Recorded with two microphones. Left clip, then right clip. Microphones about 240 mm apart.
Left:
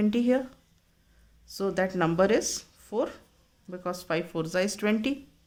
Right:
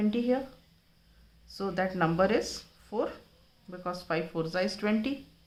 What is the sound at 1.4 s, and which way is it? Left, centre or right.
Speech, left.